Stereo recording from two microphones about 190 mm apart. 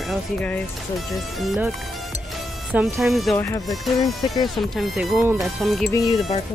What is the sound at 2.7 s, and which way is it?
Speech, 5° right (ahead or behind).